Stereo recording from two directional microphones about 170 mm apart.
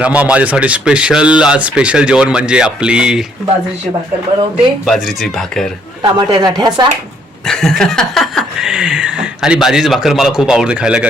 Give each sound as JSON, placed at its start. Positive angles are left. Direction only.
{"t": 0.0, "sound": "speech", "side_deg": -5}
{"t": 4.9, "sound": "speech", "side_deg": 0}
{"t": 6.0, "sound": "speech", "side_deg": -25}
{"t": 7.4, "sound": "speech", "side_deg": 5}